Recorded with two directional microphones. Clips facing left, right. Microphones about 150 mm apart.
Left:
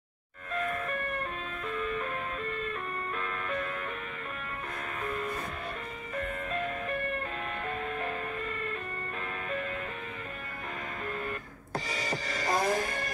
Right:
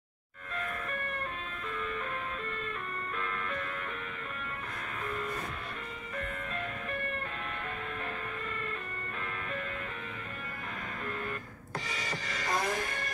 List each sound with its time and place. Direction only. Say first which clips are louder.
11.7 s music: left 4 dB; 35° left (ahead or behind)